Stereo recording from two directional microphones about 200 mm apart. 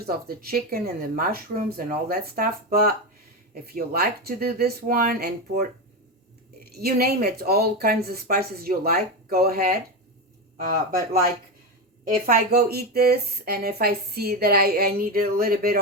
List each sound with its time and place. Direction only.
0.0 s speech: 50° right (ahead or behind)
6.7 s speech: 50° right (ahead or behind)